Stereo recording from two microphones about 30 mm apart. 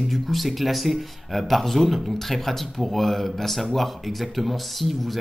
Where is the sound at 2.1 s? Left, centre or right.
Centre.